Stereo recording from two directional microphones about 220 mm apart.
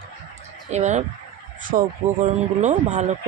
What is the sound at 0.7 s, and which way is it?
Speech, 30° right (ahead or behind).